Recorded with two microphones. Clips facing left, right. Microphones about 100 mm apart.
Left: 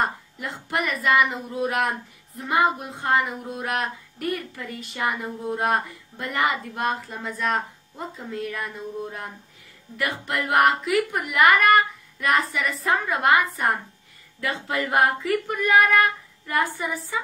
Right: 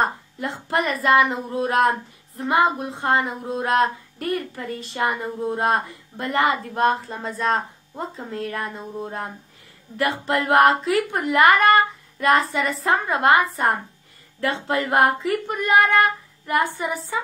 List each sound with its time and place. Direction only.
0.0 s speech: 30° right (ahead or behind)